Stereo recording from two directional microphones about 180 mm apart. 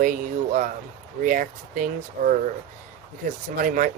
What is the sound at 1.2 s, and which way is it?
Speech, 50° right (ahead or behind).